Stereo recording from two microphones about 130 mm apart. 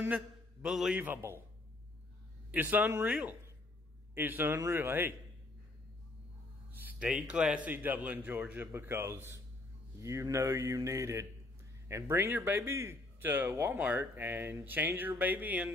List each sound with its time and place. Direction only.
0.0 s a man's voice: 10° right (ahead or behind)
2.5 s speech: 15° right (ahead or behind)
6.8 s speech: 10° right (ahead or behind)